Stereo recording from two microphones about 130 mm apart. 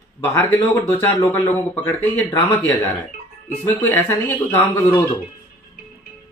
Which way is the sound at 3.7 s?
15° left (ahead or behind).